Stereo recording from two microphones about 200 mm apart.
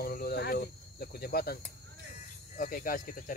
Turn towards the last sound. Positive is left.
turn(degrees=45)  # may be behind; listen again after turning